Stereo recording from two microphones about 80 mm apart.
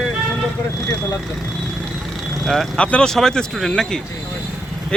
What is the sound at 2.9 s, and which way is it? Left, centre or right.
Speech, centre.